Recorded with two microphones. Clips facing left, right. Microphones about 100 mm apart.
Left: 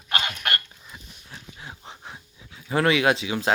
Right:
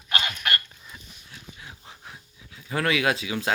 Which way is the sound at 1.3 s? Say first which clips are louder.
Left 3 dB; 35° left (ahead or behind).